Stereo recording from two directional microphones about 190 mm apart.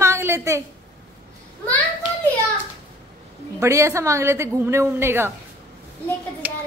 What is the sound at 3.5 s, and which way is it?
A woman's voice, 15° right (ahead or behind).